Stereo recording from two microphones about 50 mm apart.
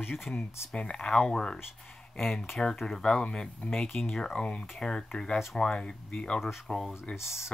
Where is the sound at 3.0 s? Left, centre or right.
Centre.